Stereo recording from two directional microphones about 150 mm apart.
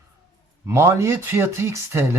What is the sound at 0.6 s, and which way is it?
Speech, 20° right (ahead or behind).